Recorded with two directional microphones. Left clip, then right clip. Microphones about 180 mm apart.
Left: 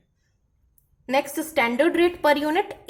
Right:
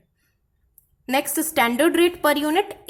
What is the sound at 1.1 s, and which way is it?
A woman's voice, 20° right (ahead or behind).